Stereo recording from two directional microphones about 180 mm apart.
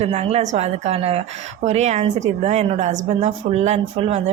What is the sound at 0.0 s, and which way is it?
A woman's voice, 35° right (ahead or behind).